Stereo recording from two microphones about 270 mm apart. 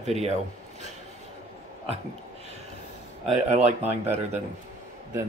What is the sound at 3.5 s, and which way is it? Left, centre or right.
Speech, right.